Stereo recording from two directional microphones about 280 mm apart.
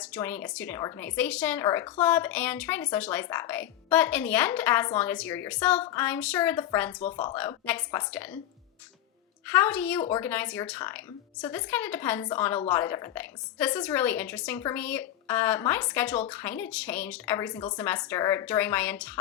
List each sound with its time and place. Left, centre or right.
0.0 s speech: centre
7.0 s speech: left
7.3 s speech: centre
9.5 s speech: centre